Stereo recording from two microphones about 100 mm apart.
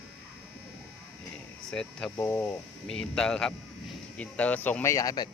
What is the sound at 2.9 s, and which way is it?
Speech, 5° left (ahead or behind).